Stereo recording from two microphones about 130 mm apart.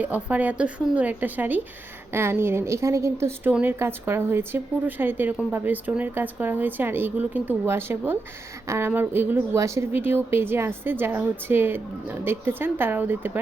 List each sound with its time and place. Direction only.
0.0 s a woman's voice: 10° right (ahead or behind)